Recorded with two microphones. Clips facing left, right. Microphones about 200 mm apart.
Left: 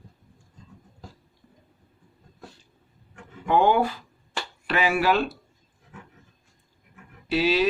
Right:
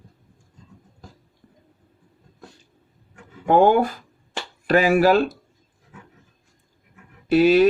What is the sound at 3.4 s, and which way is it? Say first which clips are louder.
Speech: right 5 dB; 45° right (ahead or behind).